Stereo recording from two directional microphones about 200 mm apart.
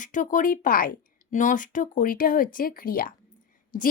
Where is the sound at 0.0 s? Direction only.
40° left (ahead or behind).